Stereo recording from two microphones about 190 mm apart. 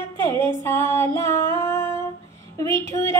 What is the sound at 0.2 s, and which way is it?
Music, 15° left (ahead or behind).